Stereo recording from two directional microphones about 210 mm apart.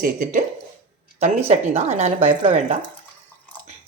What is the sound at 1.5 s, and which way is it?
Speech, 30° right (ahead or behind).